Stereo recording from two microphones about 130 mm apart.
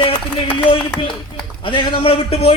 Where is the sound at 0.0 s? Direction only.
45° left (ahead or behind).